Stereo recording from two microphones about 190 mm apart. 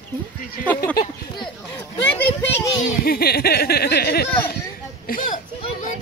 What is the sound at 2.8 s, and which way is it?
Speech, 55° left (ahead or behind).